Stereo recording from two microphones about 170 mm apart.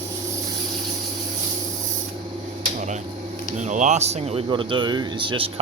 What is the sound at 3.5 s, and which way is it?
Speech, 45° right (ahead or behind).